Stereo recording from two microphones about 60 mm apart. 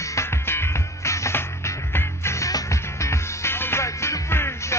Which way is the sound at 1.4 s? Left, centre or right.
Left.